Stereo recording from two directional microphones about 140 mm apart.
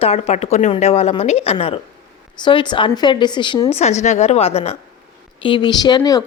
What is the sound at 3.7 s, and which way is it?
A woman's voice, 55° left (ahead or behind).